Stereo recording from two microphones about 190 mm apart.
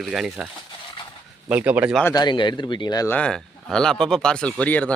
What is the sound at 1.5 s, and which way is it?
Speech, 10° right (ahead or behind).